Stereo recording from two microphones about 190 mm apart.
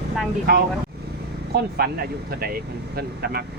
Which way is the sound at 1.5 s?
55° right (ahead or behind).